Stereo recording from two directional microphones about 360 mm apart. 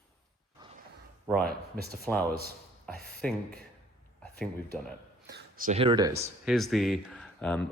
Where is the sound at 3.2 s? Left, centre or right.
Centre.